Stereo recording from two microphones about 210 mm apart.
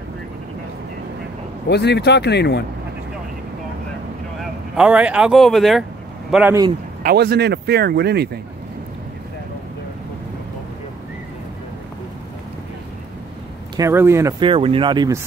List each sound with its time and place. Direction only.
1.7 s speech: 55° left (ahead or behind)
4.4 s speech: 5° right (ahead or behind)
7.0 s speech: 45° right (ahead or behind)
13.7 s speech: 10° right (ahead or behind)
14.4 s speech: 25° right (ahead or behind)